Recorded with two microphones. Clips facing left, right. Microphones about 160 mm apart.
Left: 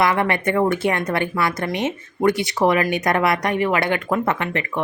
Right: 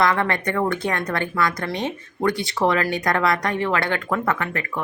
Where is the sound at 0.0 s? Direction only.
20° left (ahead or behind).